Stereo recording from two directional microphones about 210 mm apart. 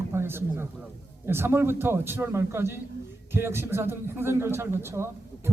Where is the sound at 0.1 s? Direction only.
10° right (ahead or behind).